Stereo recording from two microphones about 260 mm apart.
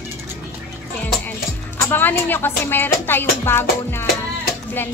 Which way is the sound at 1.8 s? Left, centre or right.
Centre.